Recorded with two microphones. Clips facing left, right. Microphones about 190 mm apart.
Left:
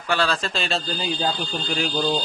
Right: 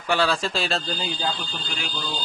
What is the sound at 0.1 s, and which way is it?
Speech, 15° right (ahead or behind).